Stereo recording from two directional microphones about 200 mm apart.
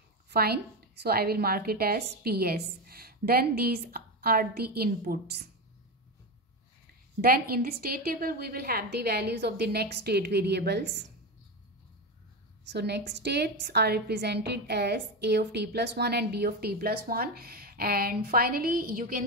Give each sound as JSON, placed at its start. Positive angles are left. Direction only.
{"t": 0.3, "sound": "a woman's voice", "side_deg": -50}
{"t": 7.2, "sound": "a woman's voice", "side_deg": -50}
{"t": 12.6, "sound": "a woman's voice", "side_deg": -55}